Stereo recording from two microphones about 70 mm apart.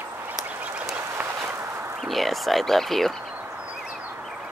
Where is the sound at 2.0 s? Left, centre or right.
Centre.